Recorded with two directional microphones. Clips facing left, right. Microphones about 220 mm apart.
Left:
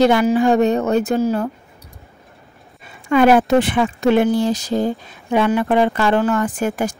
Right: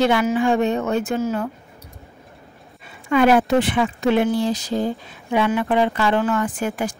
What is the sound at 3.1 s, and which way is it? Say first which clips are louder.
Speech: left 3 dB; 45° left (ahead or behind).